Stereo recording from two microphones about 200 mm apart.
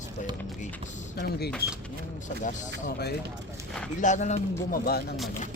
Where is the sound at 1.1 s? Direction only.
55° left (ahead or behind).